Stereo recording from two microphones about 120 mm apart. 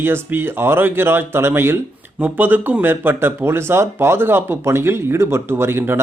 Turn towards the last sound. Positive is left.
turn(degrees=-20)  # may be behind; listen again after turning